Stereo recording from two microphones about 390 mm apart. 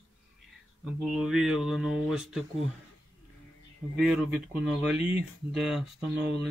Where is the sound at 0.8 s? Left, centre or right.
Centre.